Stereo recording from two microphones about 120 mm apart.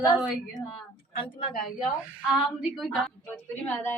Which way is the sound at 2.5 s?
Centre (ahead or behind).